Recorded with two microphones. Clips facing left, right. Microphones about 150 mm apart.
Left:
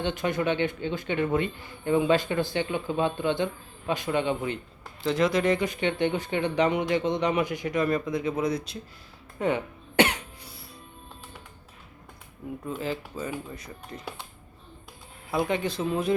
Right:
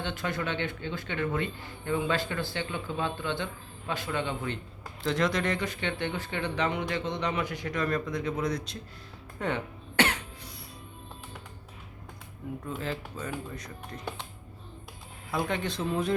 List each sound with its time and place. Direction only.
0.0 s speech: 20° left (ahead or behind)
5.0 s speech: 5° left (ahead or behind)
9.9 s cough: 15° left (ahead or behind)
12.6 s speech: 5° left (ahead or behind)
15.3 s speech: 5° left (ahead or behind)